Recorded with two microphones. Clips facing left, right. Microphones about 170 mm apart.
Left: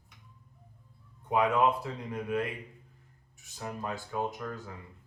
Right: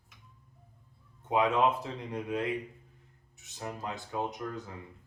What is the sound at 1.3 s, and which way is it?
Speech, 20° right (ahead or behind).